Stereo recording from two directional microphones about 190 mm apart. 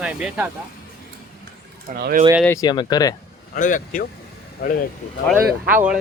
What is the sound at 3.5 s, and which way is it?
Speech, 45° left (ahead or behind).